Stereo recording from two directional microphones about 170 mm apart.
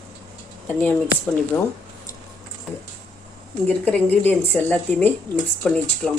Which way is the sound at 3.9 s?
10° left (ahead or behind).